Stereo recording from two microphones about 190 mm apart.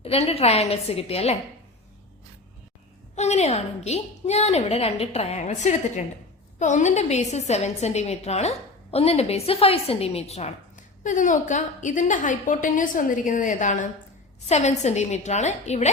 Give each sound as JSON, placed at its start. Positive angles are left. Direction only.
{"t": 0.0, "sound": "a woman's voice", "side_deg": 30}
{"t": 3.2, "sound": "a woman's voice", "side_deg": 35}